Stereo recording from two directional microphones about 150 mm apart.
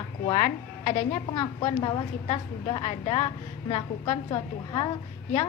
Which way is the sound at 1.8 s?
30° left (ahead or behind).